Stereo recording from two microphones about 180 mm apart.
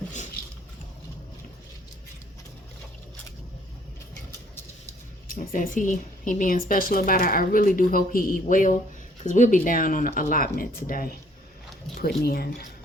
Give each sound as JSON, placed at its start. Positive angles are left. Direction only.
{"t": 5.3, "sound": "a woman's voice", "side_deg": 50}